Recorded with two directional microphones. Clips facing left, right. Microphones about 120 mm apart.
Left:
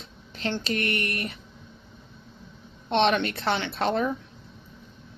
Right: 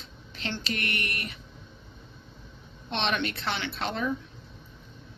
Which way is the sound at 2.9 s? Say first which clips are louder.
Left 7 dB; 45° left (ahead or behind).